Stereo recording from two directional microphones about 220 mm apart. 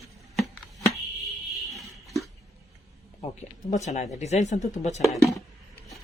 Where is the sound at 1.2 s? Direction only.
Centre (ahead or behind).